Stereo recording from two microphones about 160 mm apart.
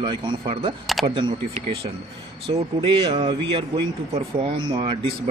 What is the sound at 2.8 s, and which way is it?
Speech, 35° right (ahead or behind).